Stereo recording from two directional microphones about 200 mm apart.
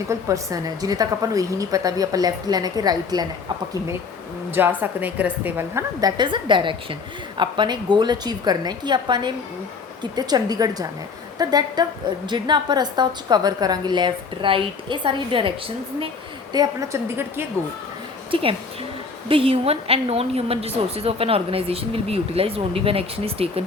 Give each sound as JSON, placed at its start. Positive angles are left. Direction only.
{"t": 0.1, "sound": "a woman's voice", "side_deg": -15}
{"t": 4.8, "sound": "a woman's voice", "side_deg": -10}
{"t": 18.3, "sound": "a woman's voice", "side_deg": -25}